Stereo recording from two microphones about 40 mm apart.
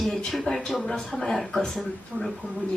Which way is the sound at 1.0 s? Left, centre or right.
Centre.